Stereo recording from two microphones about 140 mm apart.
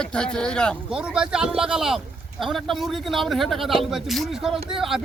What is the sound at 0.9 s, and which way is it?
Speech, 5° right (ahead or behind).